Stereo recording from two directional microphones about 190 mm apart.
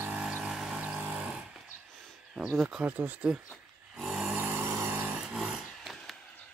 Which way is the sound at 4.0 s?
5° right (ahead or behind).